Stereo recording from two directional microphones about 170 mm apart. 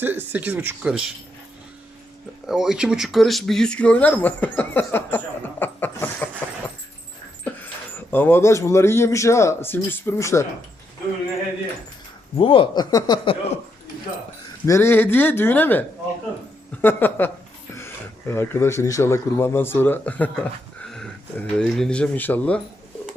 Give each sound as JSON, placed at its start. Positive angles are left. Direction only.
{"t": 0.0, "sound": "speech", "side_deg": -10}
{"t": 2.5, "sound": "speech", "side_deg": -5}
{"t": 7.4, "sound": "speech", "side_deg": 10}
{"t": 12.4, "sound": "speech", "side_deg": 30}
{"t": 14.7, "sound": "speech", "side_deg": 15}
{"t": 16.8, "sound": "speech", "side_deg": 10}